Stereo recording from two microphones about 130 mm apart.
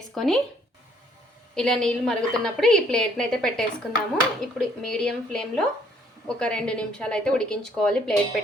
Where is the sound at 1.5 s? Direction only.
5° left (ahead or behind).